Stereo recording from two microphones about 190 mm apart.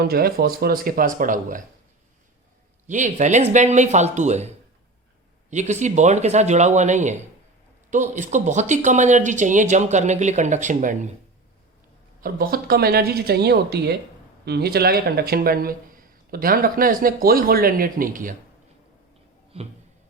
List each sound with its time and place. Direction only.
0.0 s speech: 55° right (ahead or behind)
2.8 s speech: 40° right (ahead or behind)
5.5 s speech: 40° right (ahead or behind)
12.2 s speech: 50° right (ahead or behind)
19.5 s speech: 30° right (ahead or behind)